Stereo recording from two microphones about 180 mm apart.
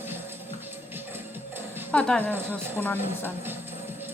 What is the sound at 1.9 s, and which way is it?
A woman's voice, 5° left (ahead or behind).